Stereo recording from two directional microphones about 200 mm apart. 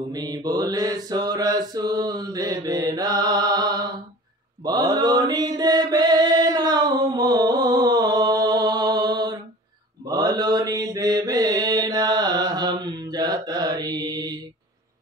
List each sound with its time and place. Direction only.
0.1 s mantra: 20° right (ahead or behind)